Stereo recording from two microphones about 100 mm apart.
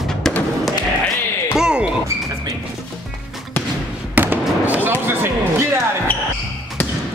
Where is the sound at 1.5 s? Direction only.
5° right (ahead or behind).